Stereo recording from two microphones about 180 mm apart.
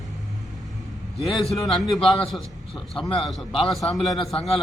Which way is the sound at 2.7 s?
25° left (ahead or behind).